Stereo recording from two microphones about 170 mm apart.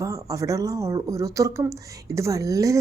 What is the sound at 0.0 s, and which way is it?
Speech, 20° right (ahead or behind).